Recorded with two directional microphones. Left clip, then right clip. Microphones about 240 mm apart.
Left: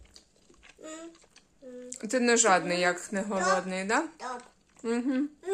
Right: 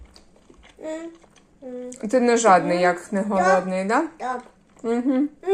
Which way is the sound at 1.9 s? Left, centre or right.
Centre.